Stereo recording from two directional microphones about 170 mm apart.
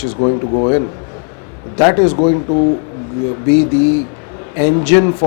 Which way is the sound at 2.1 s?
30° left (ahead or behind).